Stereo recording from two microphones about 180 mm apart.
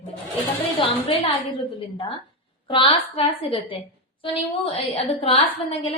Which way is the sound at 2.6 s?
30° left (ahead or behind).